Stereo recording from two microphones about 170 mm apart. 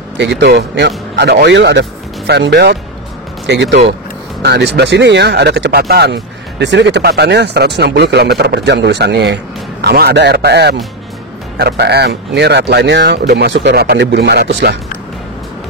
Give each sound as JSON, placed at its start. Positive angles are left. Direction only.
{"t": 0.2, "sound": "a man's voice", "side_deg": -85}
{"t": 4.4, "sound": "a man's voice", "side_deg": -80}
{"t": 6.6, "sound": "a man's voice", "side_deg": -90}